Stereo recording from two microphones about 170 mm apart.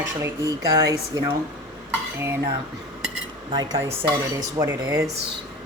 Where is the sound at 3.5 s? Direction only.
25° right (ahead or behind).